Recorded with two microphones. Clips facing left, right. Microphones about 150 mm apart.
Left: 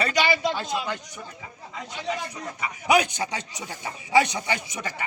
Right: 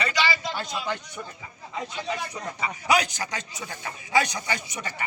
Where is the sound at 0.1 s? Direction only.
55° left (ahead or behind).